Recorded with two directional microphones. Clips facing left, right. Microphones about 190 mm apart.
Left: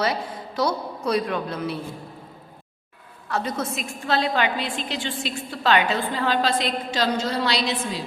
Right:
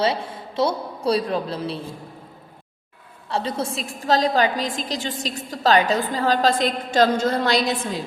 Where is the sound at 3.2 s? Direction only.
30° right (ahead or behind); by 8.0 s 50° right (ahead or behind).